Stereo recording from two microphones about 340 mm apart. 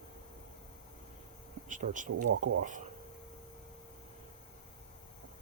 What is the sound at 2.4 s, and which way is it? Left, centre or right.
Speech, right.